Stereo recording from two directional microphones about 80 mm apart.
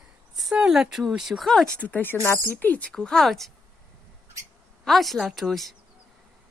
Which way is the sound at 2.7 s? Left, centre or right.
Centre.